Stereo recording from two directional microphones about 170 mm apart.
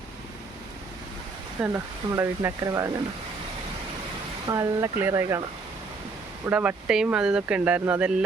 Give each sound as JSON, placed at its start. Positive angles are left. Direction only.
{"t": 1.6, "sound": "speech", "side_deg": -15}
{"t": 4.4, "sound": "speech", "side_deg": -20}
{"t": 6.4, "sound": "speech", "side_deg": -10}